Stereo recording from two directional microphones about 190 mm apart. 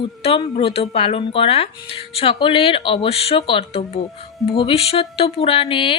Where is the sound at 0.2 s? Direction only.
30° left (ahead or behind).